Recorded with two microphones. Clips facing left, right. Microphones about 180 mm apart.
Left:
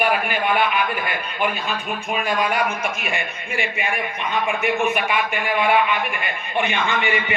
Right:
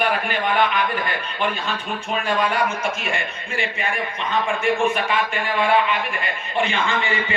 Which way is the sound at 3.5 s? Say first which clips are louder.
Left 1 dB; 10° left (ahead or behind).